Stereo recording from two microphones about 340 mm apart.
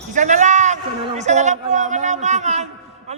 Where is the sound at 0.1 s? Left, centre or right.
Right.